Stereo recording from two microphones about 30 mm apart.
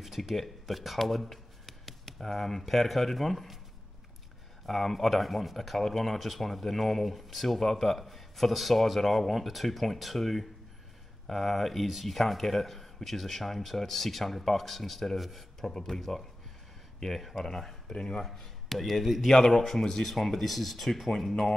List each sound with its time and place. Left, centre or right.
0.0 s a sound: centre
0.4 s shuffling cards: centre
2.2 s speech: centre
4.6 s speech: centre
6.1 s speech: centre; by 18.2 s left
18.2 s a man's voice: centre
19.2 s speech: centre
20.0 s speech: centre